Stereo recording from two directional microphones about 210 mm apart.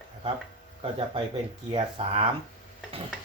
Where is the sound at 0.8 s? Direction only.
25° right (ahead or behind).